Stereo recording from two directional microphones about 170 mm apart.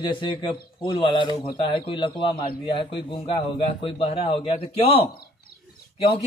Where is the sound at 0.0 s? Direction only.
30° left (ahead or behind).